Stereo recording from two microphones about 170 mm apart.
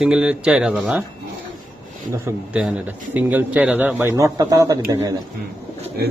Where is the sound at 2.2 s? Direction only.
5° right (ahead or behind); by 5.1 s 20° right (ahead or behind).